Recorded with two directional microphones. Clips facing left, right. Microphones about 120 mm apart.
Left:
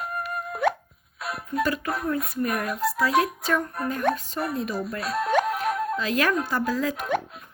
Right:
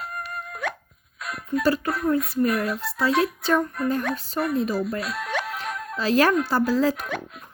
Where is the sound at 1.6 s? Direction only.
30° right (ahead or behind).